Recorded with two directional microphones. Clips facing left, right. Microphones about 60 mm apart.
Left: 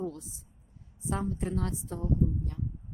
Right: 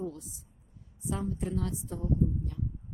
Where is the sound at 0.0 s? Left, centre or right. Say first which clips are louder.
Left 1 dB; left.